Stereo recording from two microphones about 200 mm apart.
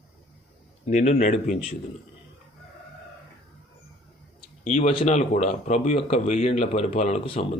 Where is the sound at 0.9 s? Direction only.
35° left (ahead or behind).